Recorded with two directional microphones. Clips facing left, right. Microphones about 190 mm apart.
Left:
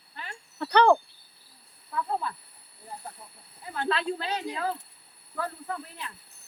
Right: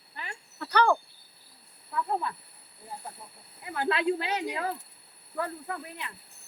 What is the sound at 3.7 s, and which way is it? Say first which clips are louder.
Speech: right 2 dB; 15° right (ahead or behind).